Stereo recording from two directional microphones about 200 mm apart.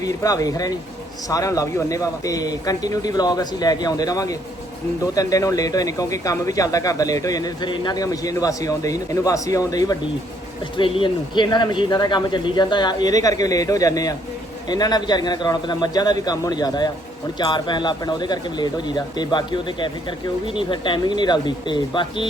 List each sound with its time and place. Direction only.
0.0 s speech: 15° left (ahead or behind)